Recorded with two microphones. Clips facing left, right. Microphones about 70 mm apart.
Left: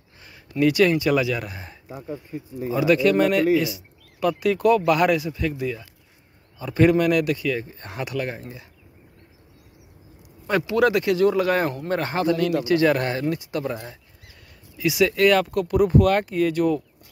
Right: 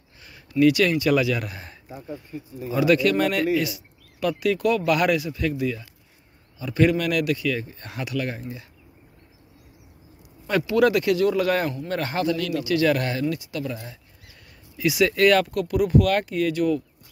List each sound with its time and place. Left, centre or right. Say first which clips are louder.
0.2 s speech: right 2 dB; left
6.6 s speech: left 3 dB; left
10.4 s speech: even; centre
13.4 s speech: left 3 dB; left
14.8 s speech: even; centre
15.5 s speech: left 2 dB; left